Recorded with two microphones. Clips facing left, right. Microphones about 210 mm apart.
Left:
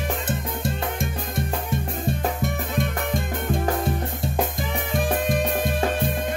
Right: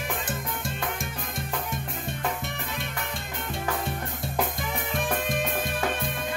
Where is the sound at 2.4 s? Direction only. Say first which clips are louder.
Left 9 dB; 50° left (ahead or behind).